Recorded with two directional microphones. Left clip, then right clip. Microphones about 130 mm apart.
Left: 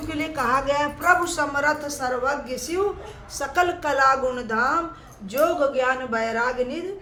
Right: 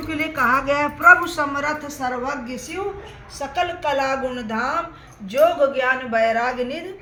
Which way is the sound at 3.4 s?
35° left (ahead or behind).